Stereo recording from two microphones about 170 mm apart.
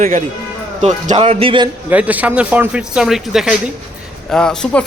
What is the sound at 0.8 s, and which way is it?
Speech, 40° right (ahead or behind).